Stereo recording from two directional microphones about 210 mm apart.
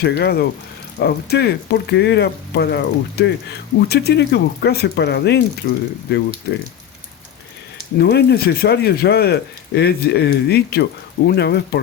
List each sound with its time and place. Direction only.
0.0 s speech: 50° left (ahead or behind)
7.9 s speech: 50° left (ahead or behind)